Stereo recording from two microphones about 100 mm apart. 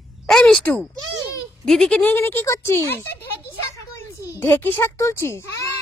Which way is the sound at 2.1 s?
25° left (ahead or behind).